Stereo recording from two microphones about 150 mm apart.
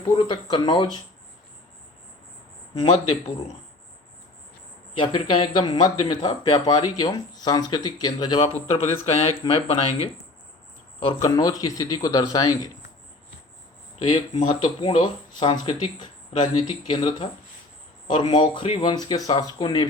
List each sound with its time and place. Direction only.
0.0 s speech: 30° left (ahead or behind)
2.7 s speech: 40° left (ahead or behind)
4.9 s speech: 35° left (ahead or behind)
8.7 s speech: 45° left (ahead or behind)
11.2 s speech: 25° left (ahead or behind)
14.8 s speech: 35° left (ahead or behind)